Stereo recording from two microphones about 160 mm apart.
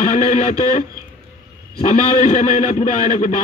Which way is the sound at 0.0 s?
50° left (ahead or behind).